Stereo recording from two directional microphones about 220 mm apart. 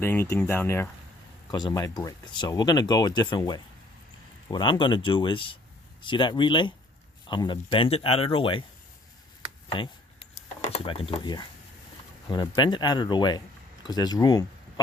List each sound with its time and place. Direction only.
0.0 s speech: 10° left (ahead or behind)
9.6 s a sound: 20° left (ahead or behind)
12.3 s speech: 20° left (ahead or behind)